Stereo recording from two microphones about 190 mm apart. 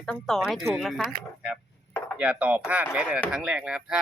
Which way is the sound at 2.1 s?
5° right (ahead or behind).